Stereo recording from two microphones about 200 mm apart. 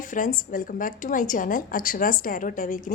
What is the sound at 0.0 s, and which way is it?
A woman's voice, 40° left (ahead or behind).